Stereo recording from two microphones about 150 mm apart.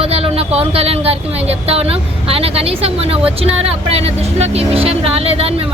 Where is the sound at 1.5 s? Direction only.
45° right (ahead or behind).